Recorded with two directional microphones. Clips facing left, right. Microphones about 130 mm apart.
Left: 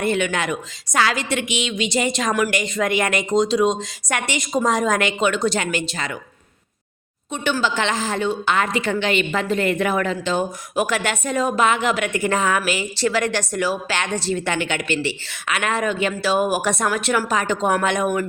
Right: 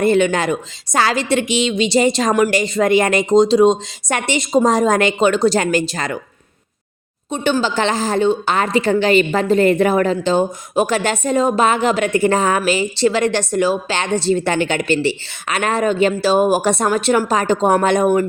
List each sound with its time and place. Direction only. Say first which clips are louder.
0.0 s a woman's voice: right 7 dB; 35° right (ahead or behind)
7.3 s a woman's voice: right 4 dB; 30° right (ahead or behind)